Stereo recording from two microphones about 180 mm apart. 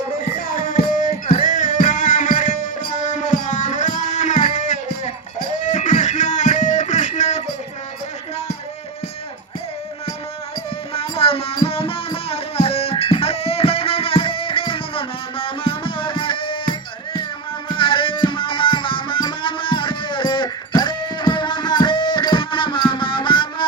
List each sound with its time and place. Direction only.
0.2 s music: 50° left (ahead or behind)
3.1 s a sound: 45° left (ahead or behind)
5.6 s music: 45° left (ahead or behind)
10.9 s music: 30° left (ahead or behind)